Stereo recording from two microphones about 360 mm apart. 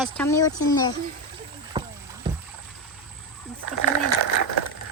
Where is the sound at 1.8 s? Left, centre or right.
Centre.